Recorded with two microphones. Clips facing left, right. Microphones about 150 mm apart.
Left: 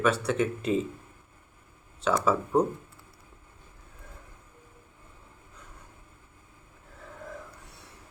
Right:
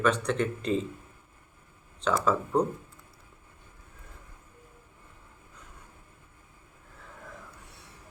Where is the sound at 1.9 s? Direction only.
5° left (ahead or behind).